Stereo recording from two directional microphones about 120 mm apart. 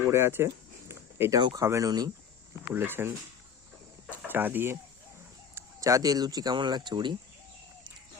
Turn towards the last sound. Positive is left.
turn(degrees=-40)  # may be behind; listen again after turning